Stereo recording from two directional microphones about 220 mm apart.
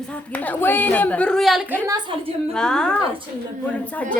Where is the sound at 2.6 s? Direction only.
5° left (ahead or behind).